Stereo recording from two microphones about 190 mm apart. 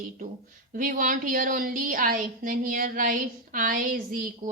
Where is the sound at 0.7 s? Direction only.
45° right (ahead or behind).